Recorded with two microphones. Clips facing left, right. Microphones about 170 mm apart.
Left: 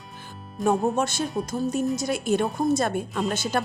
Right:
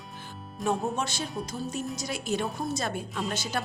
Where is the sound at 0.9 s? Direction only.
50° left (ahead or behind).